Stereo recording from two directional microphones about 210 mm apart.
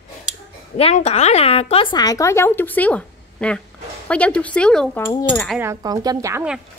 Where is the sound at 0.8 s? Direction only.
30° left (ahead or behind); by 5.6 s 5° left (ahead or behind).